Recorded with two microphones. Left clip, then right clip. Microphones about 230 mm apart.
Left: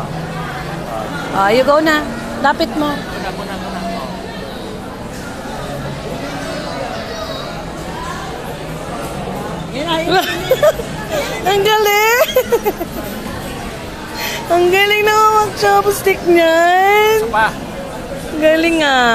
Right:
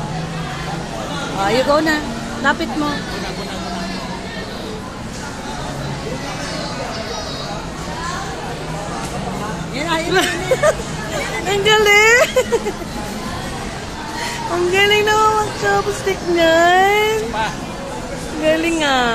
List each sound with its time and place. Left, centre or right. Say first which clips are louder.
1.4 s speech: left 4 dB; centre
10.0 s speech: left 3 dB; centre
14.2 s child singing: left 6 dB; left
18.4 s speech: left 4 dB; centre